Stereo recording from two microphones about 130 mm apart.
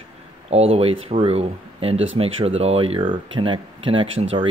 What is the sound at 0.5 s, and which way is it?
Speech, 50° right (ahead or behind).